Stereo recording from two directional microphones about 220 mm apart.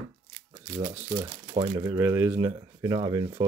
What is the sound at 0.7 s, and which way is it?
Speech, 15° right (ahead or behind).